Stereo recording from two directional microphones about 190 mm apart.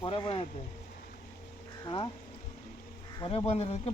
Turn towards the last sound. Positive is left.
turn(degrees=35)  # may be behind; listen again after turning